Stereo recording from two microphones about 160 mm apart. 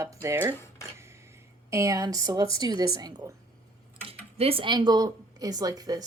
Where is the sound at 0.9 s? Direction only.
15° right (ahead or behind).